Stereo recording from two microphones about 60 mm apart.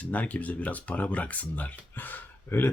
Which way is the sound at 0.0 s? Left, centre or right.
Left.